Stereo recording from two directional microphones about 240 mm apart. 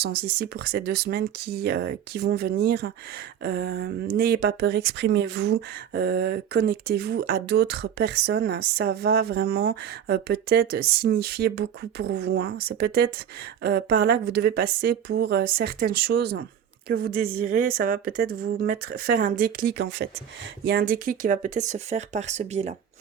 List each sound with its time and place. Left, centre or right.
0.0 s speech: right